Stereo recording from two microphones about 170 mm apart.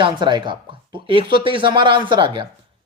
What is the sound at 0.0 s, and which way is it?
A man's voice, 25° right (ahead or behind).